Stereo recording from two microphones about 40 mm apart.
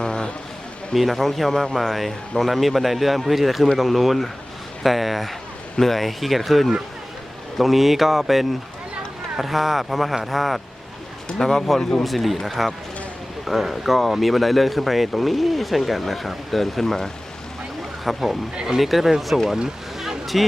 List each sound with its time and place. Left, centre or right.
0.0 s a sound: centre
0.9 s speech: centre
11.3 s speech: centre
11.8 s speech: centre
12.0 s speech: centre
20.0 s a sound: centre